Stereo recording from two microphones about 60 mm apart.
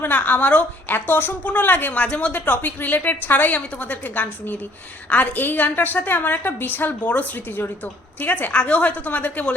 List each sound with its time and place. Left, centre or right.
0.0 s a woman's voice: left